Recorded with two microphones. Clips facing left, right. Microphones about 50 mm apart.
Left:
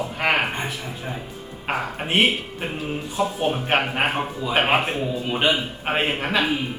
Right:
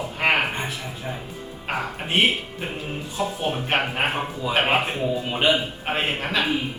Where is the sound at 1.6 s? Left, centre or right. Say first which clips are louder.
Left 2 dB; centre.